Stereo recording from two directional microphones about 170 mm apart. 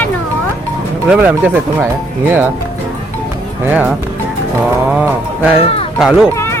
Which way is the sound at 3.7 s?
10° right (ahead or behind).